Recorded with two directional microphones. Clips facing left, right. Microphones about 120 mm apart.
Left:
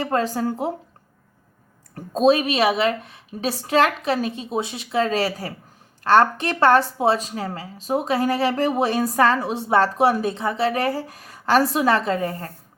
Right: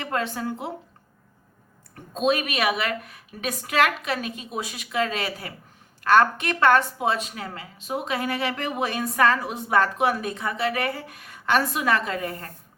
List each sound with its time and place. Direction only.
0.0 s a woman's voice: 35° left (ahead or behind)
2.0 s a woman's voice: 35° left (ahead or behind)